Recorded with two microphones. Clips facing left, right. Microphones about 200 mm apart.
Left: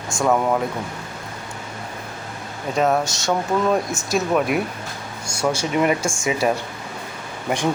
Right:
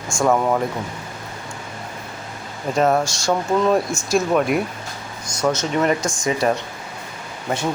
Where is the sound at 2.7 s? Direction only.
Centre (ahead or behind).